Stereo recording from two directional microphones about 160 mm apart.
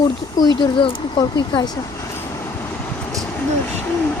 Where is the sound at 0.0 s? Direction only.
25° left (ahead or behind).